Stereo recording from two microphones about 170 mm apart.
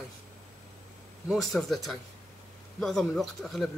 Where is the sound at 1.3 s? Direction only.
Centre (ahead or behind).